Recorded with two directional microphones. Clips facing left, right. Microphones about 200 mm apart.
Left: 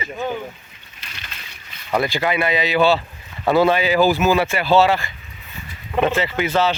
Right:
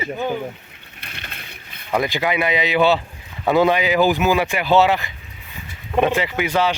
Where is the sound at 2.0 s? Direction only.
15° right (ahead or behind).